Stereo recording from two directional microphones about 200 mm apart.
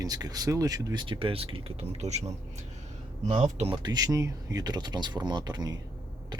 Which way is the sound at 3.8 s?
20° right (ahead or behind).